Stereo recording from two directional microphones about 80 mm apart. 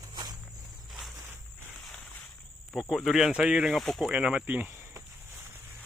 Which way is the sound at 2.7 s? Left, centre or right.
Centre.